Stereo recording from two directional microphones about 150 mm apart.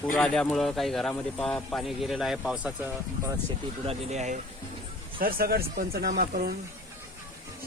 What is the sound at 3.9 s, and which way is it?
Speech, 50° right (ahead or behind).